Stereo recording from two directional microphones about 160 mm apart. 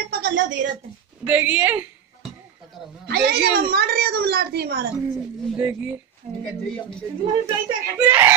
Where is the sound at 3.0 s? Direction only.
90° right.